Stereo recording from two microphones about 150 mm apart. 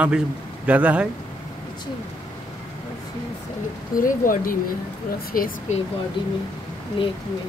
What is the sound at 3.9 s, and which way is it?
Speech, 65° left (ahead or behind).